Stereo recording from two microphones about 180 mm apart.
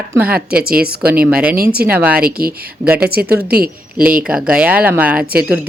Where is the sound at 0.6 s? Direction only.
55° right (ahead or behind).